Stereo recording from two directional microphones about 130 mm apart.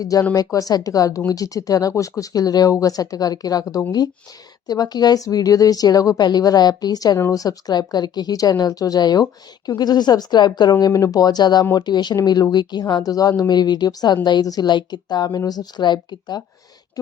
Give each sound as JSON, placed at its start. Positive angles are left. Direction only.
{"t": 0.0, "sound": "a woman's voice", "side_deg": 25}